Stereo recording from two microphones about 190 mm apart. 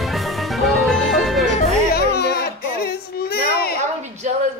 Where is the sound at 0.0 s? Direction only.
Centre (ahead or behind).